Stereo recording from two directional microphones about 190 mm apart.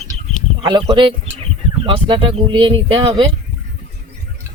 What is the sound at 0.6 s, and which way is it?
Speech, 25° right (ahead or behind).